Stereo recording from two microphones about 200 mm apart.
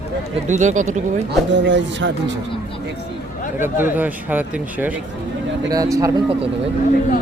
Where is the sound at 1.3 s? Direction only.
65° right (ahead or behind).